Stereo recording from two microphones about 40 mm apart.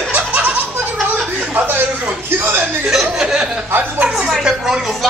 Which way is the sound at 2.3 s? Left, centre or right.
Right.